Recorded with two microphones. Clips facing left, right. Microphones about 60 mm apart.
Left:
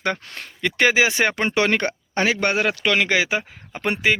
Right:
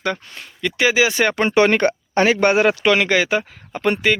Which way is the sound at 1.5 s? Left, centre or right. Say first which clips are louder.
Right 8 dB; right.